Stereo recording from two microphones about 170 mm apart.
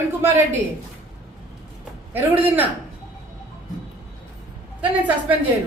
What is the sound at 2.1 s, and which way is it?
Speech, 10° right (ahead or behind).